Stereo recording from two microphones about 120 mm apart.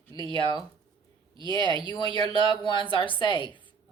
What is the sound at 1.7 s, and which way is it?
A woman's voice, 35° left (ahead or behind).